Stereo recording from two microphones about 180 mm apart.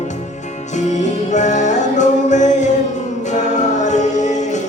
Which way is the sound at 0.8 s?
40° left (ahead or behind).